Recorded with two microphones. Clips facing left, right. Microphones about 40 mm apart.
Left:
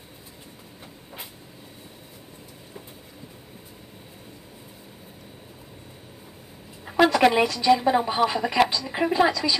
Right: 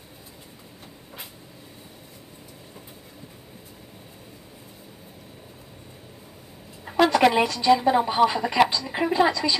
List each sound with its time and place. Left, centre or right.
6.9 s a woman's voice: centre